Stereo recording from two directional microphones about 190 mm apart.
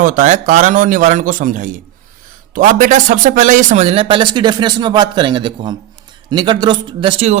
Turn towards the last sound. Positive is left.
turn(degrees=-30)  # may be behind; listen again after turning